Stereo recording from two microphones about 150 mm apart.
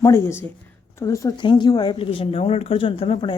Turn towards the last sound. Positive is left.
turn(degrees=35)  # may be behind; listen again after turning